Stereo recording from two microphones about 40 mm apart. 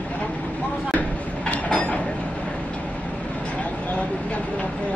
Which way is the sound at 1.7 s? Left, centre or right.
Left.